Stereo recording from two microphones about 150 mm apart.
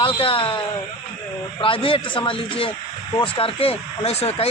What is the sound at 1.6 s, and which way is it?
Speech, 35° left (ahead or behind).